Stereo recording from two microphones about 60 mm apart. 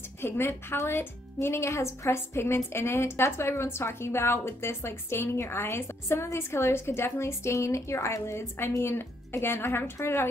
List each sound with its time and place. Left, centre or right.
0.2 s speech: left